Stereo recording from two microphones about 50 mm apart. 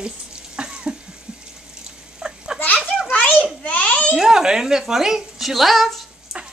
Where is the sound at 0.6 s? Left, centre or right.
Centre.